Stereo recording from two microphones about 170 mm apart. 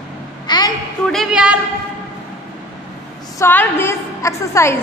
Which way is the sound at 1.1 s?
Centre (ahead or behind).